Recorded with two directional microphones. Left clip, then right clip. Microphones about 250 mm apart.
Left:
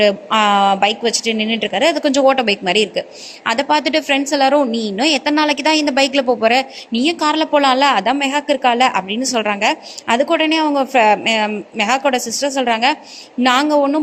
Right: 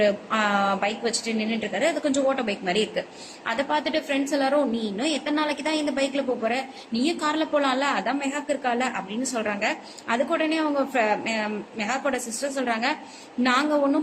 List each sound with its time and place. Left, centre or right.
0.0 s a woman's voice: left